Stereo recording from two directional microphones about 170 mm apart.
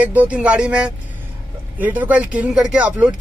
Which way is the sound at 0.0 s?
10° right (ahead or behind).